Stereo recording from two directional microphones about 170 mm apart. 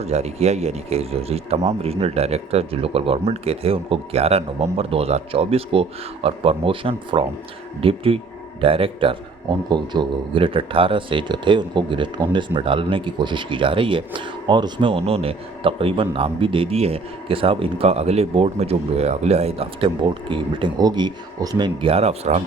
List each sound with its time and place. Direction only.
0.0 s speech: 40° right (ahead or behind)